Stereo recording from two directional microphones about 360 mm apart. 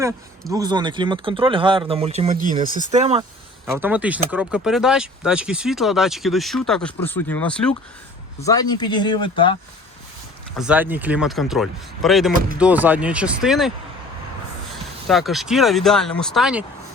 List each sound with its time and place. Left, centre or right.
0.0 s speech: centre
3.7 s speech: centre
10.6 s speech: centre
15.0 s speech: centre